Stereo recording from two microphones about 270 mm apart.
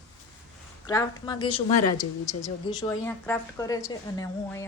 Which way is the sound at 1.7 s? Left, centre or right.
Left.